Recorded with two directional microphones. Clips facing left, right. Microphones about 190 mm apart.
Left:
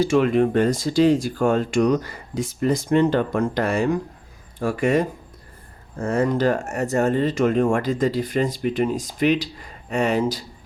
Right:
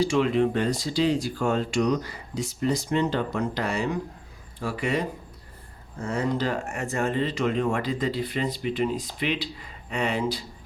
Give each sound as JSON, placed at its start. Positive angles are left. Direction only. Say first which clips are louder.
{"t": 0.0, "sound": "speech", "louder": "left 4 dB", "side_deg": 50}